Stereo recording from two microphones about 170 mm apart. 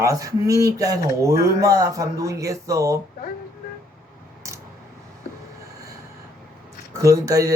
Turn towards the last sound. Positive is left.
turn(degrees=-20)  # may be behind; listen again after turning